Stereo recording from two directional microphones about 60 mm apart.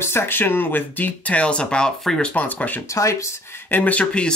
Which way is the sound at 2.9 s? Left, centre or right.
Left.